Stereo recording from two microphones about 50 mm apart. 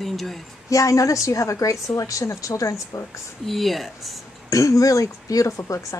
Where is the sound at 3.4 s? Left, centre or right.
Centre.